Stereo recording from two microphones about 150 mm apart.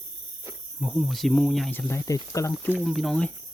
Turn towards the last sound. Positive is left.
turn(degrees=5)  # may be behind; listen again after turning